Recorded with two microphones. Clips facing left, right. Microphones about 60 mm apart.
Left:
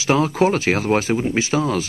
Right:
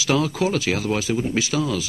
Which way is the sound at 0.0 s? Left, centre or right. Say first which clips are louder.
Left 4 dB; left.